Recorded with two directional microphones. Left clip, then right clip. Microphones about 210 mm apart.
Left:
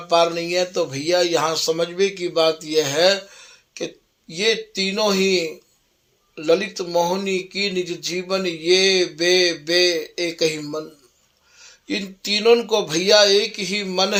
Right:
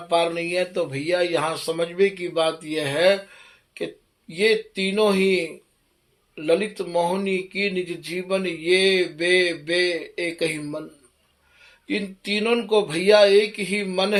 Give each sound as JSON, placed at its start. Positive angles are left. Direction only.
{"t": 0.1, "sound": "speech", "side_deg": 30}
{"t": 4.3, "sound": "speech", "side_deg": 25}
{"t": 11.9, "sound": "speech", "side_deg": 25}